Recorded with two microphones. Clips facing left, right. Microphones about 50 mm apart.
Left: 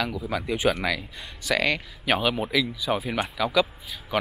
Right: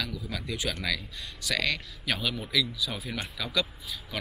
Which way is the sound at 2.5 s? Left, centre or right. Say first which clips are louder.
Left 5 dB; centre.